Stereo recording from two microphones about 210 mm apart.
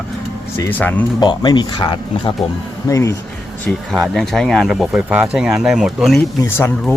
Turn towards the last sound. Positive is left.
turn(degrees=10)  # may be behind; listen again after turning